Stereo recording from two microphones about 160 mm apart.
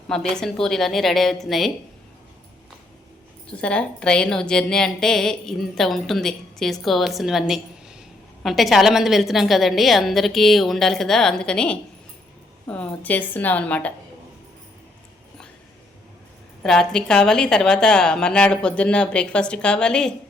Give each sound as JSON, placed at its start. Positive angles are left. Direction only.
{"t": 0.1, "sound": "a woman's voice", "side_deg": 5}
{"t": 3.6, "sound": "a woman's voice", "side_deg": 5}
{"t": 16.6, "sound": "a woman's voice", "side_deg": 5}